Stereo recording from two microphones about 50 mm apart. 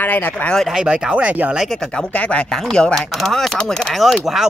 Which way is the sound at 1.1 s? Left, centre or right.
Right.